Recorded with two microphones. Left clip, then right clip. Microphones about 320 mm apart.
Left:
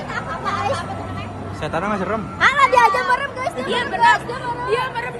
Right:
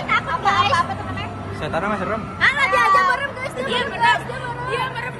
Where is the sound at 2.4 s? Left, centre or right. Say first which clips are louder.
Left 3 dB; left.